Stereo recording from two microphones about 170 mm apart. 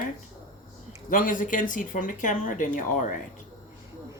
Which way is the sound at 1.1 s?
50° left (ahead or behind).